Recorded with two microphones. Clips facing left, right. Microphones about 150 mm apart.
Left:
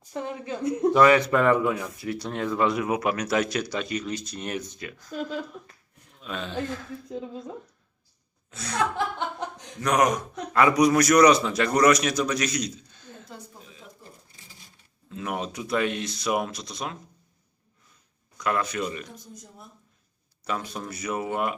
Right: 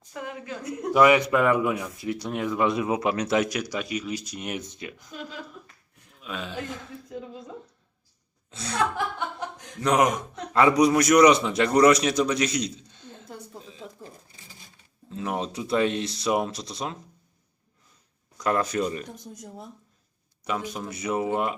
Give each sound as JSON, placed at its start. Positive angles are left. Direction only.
{"t": 0.1, "sound": "speech", "side_deg": 30}
{"t": 0.9, "sound": "speech", "side_deg": -15}
{"t": 6.2, "sound": "speech", "side_deg": -5}
{"t": 8.4, "sound": "speech", "side_deg": -30}
{"t": 9.8, "sound": "a man's voice", "side_deg": -25}
{"t": 13.8, "sound": "a sound", "side_deg": -90}
{"t": 15.1, "sound": "a man's voice", "side_deg": -30}
{"t": 18.3, "sound": "speech", "side_deg": -35}
{"t": 20.4, "sound": "a man's voice", "side_deg": -15}